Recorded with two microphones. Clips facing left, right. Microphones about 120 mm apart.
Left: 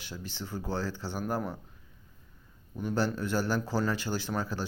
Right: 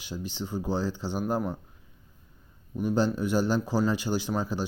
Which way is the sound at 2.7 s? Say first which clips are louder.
Right 4 dB; 15° right (ahead or behind).